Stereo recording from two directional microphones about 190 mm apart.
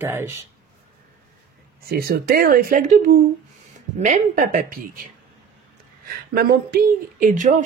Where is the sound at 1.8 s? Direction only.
55° right (ahead or behind).